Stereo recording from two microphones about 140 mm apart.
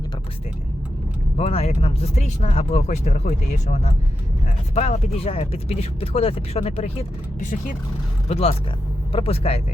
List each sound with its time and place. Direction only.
1.4 s speech: 45° left (ahead or behind)
8.3 s speech: 50° left (ahead or behind)